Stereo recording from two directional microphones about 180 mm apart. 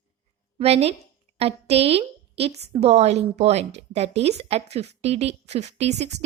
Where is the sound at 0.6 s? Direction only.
35° right (ahead or behind).